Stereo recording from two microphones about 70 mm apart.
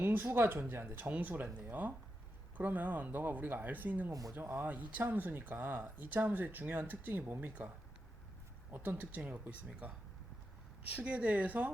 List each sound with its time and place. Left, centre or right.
0.0 s speech: right
8.7 s speech: right
10.9 s speech: centre